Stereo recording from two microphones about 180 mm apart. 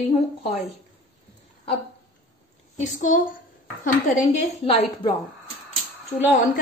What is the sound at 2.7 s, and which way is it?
Speech, 45° left (ahead or behind).